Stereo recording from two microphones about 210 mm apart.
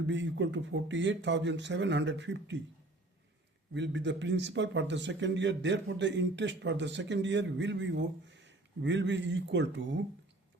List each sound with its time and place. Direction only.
0.0 s a man's voice: 60° right (ahead or behind)
3.8 s a man's voice: 55° right (ahead or behind)